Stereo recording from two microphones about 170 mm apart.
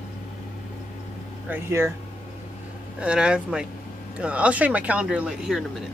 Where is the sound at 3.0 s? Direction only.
5° right (ahead or behind).